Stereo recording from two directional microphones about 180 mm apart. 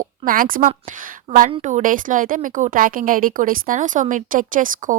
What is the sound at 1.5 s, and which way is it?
Speech, 40° right (ahead or behind).